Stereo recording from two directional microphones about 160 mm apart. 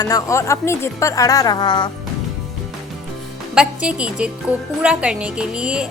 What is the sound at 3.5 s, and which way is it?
A woman's voice, 5° right (ahead or behind).